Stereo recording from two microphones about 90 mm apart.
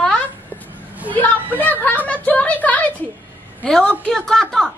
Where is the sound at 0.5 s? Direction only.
15° right (ahead or behind).